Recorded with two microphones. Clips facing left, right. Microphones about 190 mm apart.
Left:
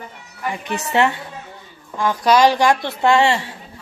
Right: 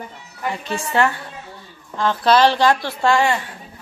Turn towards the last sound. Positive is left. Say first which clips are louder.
# left 2 dB
turn(degrees=25)  # may be behind; listen again after turning